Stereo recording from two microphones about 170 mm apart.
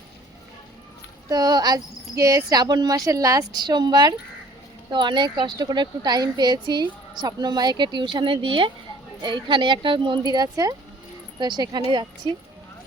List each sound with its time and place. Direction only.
1.3 s speech: 25° right (ahead or behind)